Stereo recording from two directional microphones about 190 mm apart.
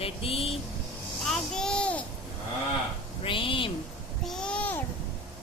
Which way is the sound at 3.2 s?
30° left (ahead or behind).